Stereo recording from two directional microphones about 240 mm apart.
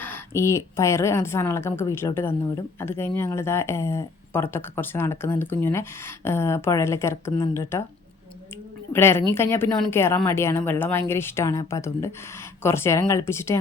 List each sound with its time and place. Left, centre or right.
0.0 s speech: centre
8.9 s speech: centre